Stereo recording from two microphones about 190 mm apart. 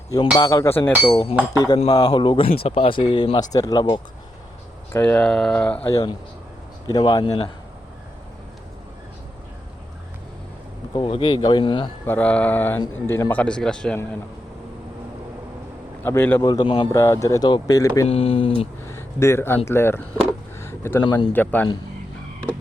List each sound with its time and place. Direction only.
0.3 s a man's voice: 20° left (ahead or behind)
1.0 s speech: 25° left (ahead or behind)
4.9 s a man's voice: 10° left (ahead or behind)
5.9 s speech: 20° left (ahead or behind)
10.9 s speech: 25° left (ahead or behind)
12.0 s a man's voice: 10° left (ahead or behind)
16.0 s speech: 10° left (ahead or behind); by 16.9 s 25° left (ahead or behind)
16.9 s a man's voice: 15° left (ahead or behind)
18.1 s speech: 30° left (ahead or behind)
18.9 s speech: 15° left (ahead or behind)
20.6 s a sound: 15° left (ahead or behind)
21.0 s speech: 25° left (ahead or behind)
21.3 s a man's voice: 10° left (ahead or behind)